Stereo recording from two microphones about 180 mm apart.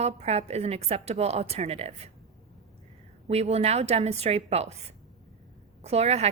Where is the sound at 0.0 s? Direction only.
35° right (ahead or behind).